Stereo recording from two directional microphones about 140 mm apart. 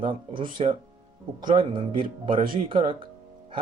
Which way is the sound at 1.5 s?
35° right (ahead or behind).